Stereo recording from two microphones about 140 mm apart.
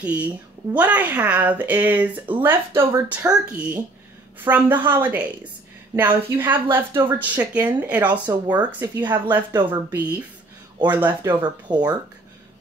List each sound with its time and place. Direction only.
0.0 s speech: 10° right (ahead or behind)
3.3 s speech: 5° right (ahead or behind)
8.1 s speech: 30° right (ahead or behind)
8.5 s speech: 15° right (ahead or behind)
11.4 s speech: 30° right (ahead or behind)